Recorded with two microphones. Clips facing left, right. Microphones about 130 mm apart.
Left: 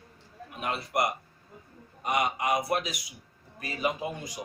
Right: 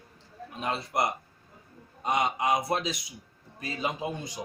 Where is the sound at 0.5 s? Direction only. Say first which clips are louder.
Even; 30° right (ahead or behind).